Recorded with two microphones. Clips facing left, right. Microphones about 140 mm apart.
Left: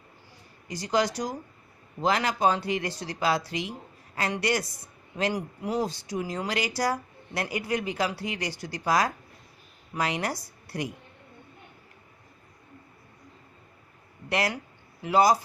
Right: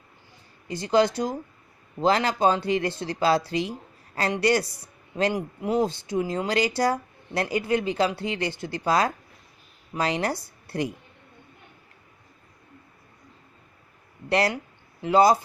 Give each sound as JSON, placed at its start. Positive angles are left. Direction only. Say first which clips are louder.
{"t": 0.7, "sound": "speech", "louder": "right 5 dB", "side_deg": -25}
{"t": 14.3, "sound": "speech", "louder": "right 5 dB", "side_deg": -30}